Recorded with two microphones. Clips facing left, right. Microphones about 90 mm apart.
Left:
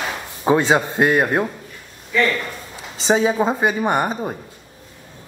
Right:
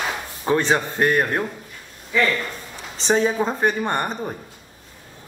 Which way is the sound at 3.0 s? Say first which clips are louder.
Left 3 dB; 10° left (ahead or behind).